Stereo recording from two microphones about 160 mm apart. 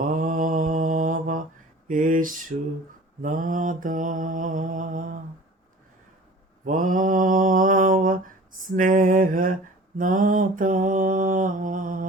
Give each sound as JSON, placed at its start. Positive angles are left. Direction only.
{"t": 0.0, "sound": "mantra", "side_deg": -55}
{"t": 6.7, "sound": "mantra", "side_deg": -55}